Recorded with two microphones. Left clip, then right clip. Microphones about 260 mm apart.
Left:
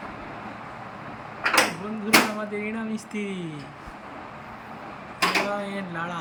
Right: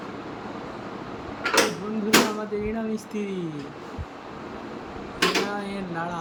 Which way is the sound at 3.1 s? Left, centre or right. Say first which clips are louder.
Right 1 dB; centre.